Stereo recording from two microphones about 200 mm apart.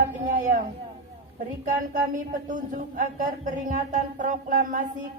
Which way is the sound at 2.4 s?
40° right (ahead or behind).